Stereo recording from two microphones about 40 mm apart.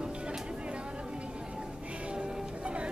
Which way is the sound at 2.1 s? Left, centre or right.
Right.